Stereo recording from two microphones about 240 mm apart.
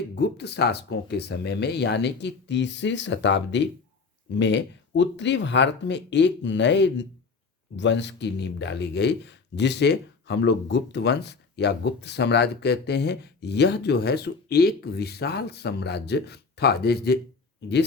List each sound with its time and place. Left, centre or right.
0.2 s speech: left